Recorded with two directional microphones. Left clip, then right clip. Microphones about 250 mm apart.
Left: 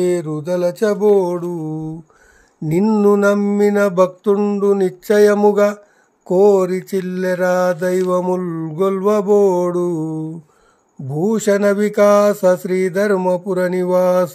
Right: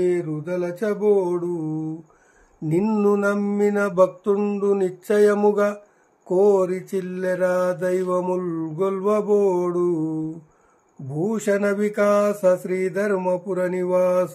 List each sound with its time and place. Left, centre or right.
0.0 s mantra: left